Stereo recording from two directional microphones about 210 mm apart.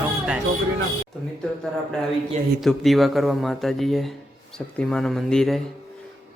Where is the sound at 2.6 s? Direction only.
Centre (ahead or behind).